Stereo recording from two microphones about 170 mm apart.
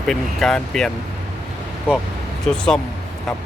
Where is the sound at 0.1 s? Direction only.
Centre (ahead or behind).